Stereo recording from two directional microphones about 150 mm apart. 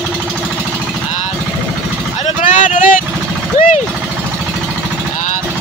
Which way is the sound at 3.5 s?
60° left (ahead or behind).